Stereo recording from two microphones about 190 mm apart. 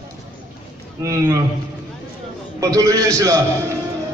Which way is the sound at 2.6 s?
20° right (ahead or behind).